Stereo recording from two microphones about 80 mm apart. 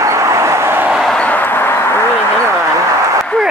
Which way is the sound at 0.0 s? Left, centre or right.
Right.